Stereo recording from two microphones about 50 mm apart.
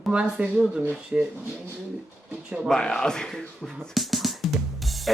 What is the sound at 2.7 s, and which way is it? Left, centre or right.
Speech, centre.